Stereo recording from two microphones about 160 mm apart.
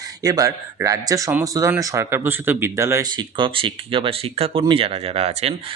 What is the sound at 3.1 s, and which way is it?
Speech, 30° right (ahead or behind).